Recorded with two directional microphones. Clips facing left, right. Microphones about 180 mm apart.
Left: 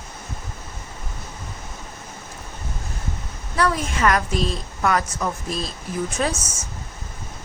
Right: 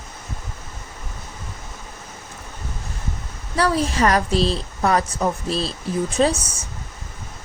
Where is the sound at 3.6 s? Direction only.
30° right (ahead or behind).